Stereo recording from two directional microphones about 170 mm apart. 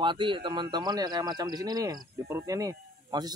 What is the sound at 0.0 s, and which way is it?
Speech, 30° right (ahead or behind).